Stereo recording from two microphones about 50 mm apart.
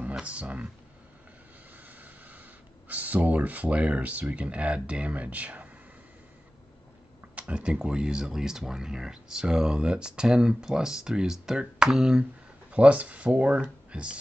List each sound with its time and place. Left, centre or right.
0.2 s speech: right
1.9 s vehicle: right
2.9 s speech: right
7.3 s speech: right
12.7 s speech: right